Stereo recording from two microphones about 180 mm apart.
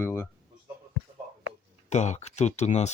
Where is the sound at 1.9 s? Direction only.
40° left (ahead or behind).